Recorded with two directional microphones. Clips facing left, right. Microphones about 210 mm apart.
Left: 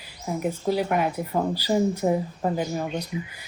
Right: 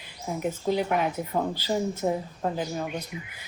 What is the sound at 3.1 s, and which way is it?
Speech, 25° left (ahead or behind).